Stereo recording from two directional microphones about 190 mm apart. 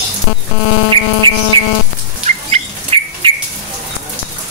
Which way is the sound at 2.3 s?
35° right (ahead or behind).